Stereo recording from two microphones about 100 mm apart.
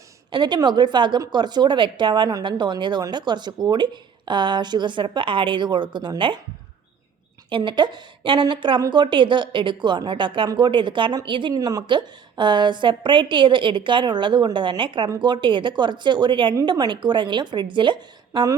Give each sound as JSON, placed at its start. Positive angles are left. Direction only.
{"t": 0.3, "sound": "speech", "side_deg": -50}
{"t": 7.5, "sound": "speech", "side_deg": -55}
{"t": 11.5, "sound": "a woman's voice", "side_deg": -35}
{"t": 11.8, "sound": "speech", "side_deg": -50}